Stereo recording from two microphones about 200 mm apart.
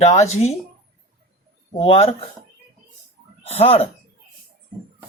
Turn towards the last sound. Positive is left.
turn(degrees=30)  # may be behind; listen again after turning